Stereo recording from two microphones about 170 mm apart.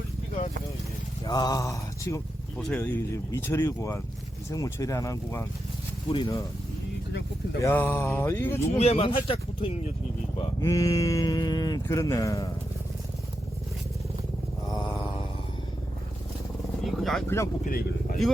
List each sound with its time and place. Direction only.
1.2 s speech: 25° left (ahead or behind)
2.6 s speech: centre (ahead or behind)
2.8 s speech: 15° left (ahead or behind)
6.1 s speech: 30° left (ahead or behind)
7.6 s speech: 15° left (ahead or behind)
8.8 s speech: 35° left (ahead or behind)
10.3 s speech: 20° left (ahead or behind)
14.7 s a sound: 25° left (ahead or behind)
16.8 s vehicle: centre (ahead or behind)
17.2 s speech: 15° left (ahead or behind)
17.7 s vehicle: 60° left (ahead or behind)